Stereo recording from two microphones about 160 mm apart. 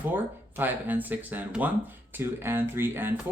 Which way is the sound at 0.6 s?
10° right (ahead or behind).